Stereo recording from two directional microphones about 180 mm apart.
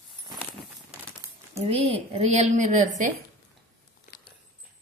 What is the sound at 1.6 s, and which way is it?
Speech, 35° right (ahead or behind).